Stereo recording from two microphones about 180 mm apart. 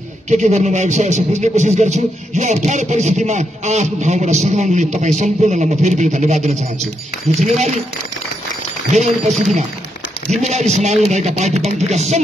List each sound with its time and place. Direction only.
0.3 s a man's voice: 40° right (ahead or behind)
8.9 s a man's voice: 40° right (ahead or behind)